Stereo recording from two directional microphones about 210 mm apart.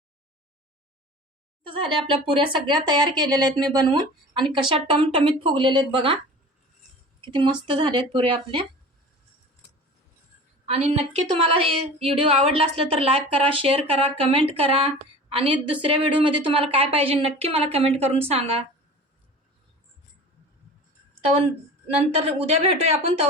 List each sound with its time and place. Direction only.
1.6 s speech: 25° right (ahead or behind)
7.6 s speech: 25° right (ahead or behind)
10.7 s speech: 30° right (ahead or behind)
21.2 s a woman's voice: 30° right (ahead or behind)